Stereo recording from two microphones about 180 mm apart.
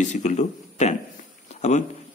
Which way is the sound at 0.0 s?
40° left (ahead or behind).